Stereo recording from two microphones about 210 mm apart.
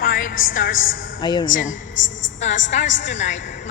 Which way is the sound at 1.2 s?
20° left (ahead or behind).